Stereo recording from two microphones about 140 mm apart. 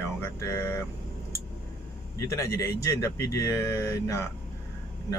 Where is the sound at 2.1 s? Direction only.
20° left (ahead or behind).